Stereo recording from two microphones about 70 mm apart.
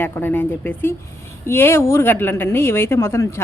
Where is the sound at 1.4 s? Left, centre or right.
Left.